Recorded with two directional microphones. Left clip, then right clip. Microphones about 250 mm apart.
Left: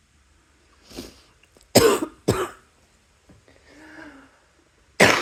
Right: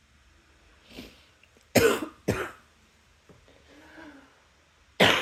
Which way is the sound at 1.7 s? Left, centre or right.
Centre.